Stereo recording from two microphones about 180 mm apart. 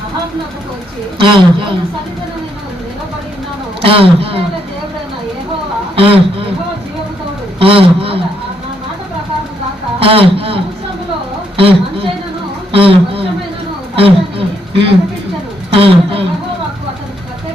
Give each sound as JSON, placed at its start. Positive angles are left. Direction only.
{"t": 1.2, "sound": "a man's voice", "side_deg": -25}
{"t": 3.8, "sound": "speech", "side_deg": -30}
{"t": 6.0, "sound": "speech", "side_deg": -30}
{"t": 7.6, "sound": "speech", "side_deg": -30}
{"t": 10.0, "sound": "a man's voice", "side_deg": -30}